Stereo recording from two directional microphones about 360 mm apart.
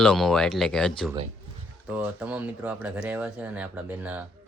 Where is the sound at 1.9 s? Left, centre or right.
Centre.